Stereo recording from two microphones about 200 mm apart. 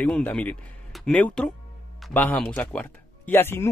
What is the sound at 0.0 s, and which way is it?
Speech, 5° left (ahead or behind).